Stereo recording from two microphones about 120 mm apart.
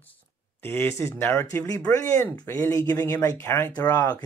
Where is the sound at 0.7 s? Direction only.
20° left (ahead or behind).